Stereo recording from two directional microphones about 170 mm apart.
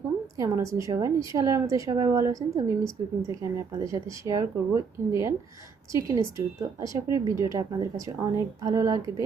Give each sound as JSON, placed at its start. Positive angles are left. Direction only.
{"t": 0.3, "sound": "a woman's voice", "side_deg": -20}